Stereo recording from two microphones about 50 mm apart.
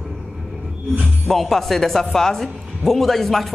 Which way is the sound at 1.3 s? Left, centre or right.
Centre.